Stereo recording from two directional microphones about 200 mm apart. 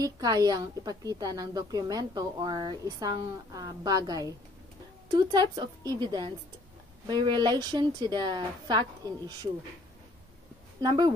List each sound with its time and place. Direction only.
0.0 s a woman's voice: 20° right (ahead or behind)
10.8 s speech: 20° right (ahead or behind)